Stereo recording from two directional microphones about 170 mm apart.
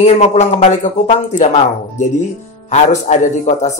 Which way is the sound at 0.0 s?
40° left (ahead or behind).